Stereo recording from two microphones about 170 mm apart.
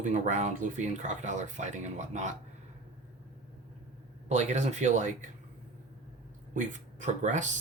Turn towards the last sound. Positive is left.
turn(degrees=-45)  # may be behind; listen again after turning